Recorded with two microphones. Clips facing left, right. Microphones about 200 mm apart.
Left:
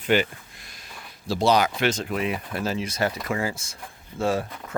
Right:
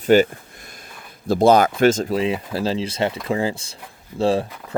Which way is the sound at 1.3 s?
50° right (ahead or behind).